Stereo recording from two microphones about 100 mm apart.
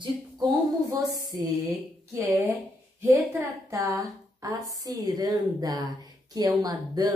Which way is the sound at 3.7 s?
30° right (ahead or behind).